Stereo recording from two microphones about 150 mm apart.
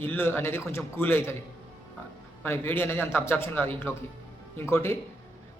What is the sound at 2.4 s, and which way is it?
A man's voice, 15° left (ahead or behind).